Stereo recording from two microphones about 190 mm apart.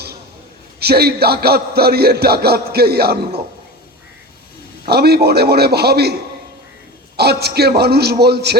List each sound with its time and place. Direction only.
0.8 s a man's voice: 55° right (ahead or behind)
4.9 s a man's voice: 55° right (ahead or behind)
7.2 s a man's voice: 55° right (ahead or behind)